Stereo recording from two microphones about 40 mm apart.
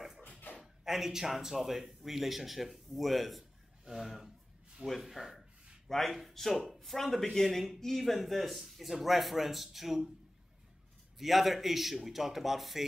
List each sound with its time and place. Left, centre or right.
0.6 s speech: centre
3.8 s a sound: centre
5.9 s a man's voice: centre
11.1 s a man's voice: centre